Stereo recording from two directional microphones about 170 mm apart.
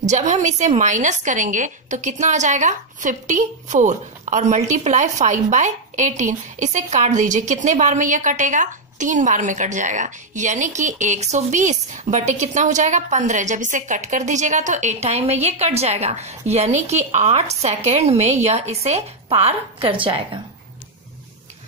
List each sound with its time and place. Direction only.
0.0 s a woman's voice: 45° right (ahead or behind)